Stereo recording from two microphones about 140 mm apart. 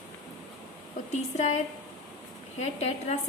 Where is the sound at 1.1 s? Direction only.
55° left (ahead or behind).